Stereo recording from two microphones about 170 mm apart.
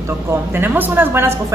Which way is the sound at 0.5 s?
10° right (ahead or behind).